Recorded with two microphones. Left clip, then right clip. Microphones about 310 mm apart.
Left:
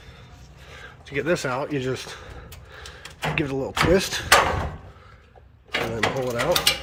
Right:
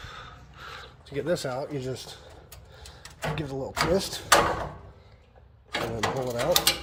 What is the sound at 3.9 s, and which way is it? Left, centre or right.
Speech, centre.